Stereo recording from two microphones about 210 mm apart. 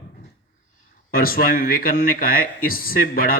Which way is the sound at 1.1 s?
45° left (ahead or behind).